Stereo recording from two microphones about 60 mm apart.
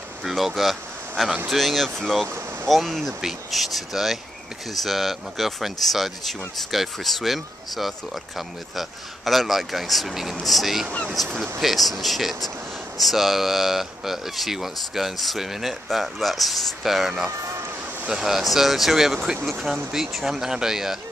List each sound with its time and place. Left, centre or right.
0.2 s speech: centre
2.2 s a sound: right
2.7 s speech: centre